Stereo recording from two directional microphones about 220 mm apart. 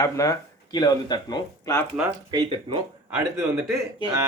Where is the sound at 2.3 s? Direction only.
20° right (ahead or behind).